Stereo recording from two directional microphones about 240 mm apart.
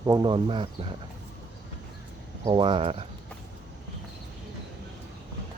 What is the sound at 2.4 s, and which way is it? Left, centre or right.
Speech, centre.